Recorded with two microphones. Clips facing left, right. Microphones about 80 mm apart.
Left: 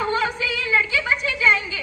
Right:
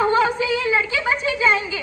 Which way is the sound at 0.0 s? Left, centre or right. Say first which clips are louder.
Right 5 dB; right.